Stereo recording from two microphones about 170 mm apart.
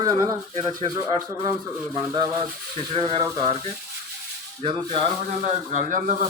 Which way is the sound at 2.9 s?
30° right (ahead or behind).